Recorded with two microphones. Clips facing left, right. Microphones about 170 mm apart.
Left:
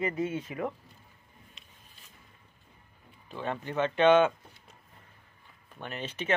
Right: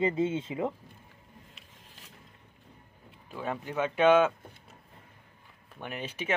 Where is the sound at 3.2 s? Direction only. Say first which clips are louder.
Even; 5° right (ahead or behind).